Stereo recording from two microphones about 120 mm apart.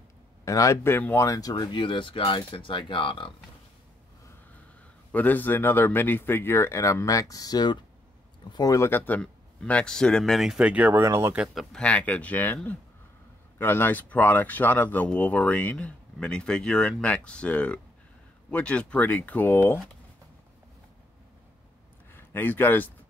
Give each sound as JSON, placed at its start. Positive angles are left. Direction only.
{"t": 0.5, "sound": "speech", "side_deg": 25}
{"t": 1.7, "sound": "speech", "side_deg": 45}
{"t": 5.1, "sound": "a man's voice", "side_deg": 15}
{"t": 11.1, "sound": "speech", "side_deg": -25}
{"t": 11.3, "sound": "a man's voice", "side_deg": 0}
{"t": 11.8, "sound": "speech", "side_deg": 10}
{"t": 13.6, "sound": "speech", "side_deg": 15}
{"t": 22.1, "sound": "a man's voice", "side_deg": 15}